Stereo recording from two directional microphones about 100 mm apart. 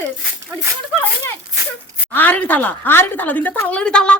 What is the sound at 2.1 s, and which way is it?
A woman's voice, 15° left (ahead or behind).